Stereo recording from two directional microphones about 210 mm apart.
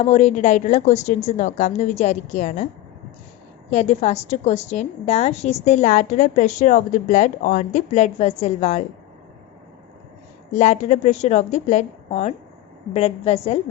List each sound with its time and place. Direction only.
0.0 s a woman's voice: 30° left (ahead or behind)
3.7 s a woman's voice: 30° left (ahead or behind)
10.5 s a woman's voice: 35° left (ahead or behind)